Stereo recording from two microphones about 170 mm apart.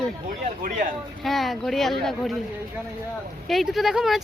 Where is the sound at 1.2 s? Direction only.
Centre (ahead or behind).